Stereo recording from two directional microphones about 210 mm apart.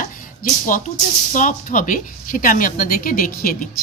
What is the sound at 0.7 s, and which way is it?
A woman's voice, 40° left (ahead or behind).